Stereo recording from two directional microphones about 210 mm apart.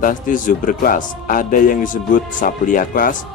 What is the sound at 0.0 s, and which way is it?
Speech, 40° left (ahead or behind).